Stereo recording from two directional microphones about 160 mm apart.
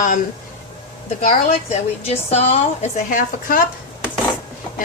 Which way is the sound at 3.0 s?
55° left (ahead or behind).